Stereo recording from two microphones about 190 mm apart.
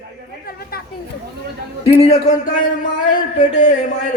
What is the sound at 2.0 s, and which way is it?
Speech, 35° left (ahead or behind).